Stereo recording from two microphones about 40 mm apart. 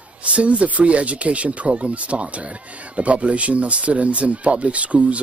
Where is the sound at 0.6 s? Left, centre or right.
Right.